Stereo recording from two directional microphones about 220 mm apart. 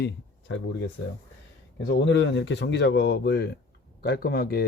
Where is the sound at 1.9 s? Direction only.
55° left (ahead or behind).